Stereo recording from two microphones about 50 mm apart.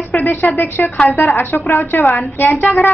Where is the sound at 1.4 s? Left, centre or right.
Left.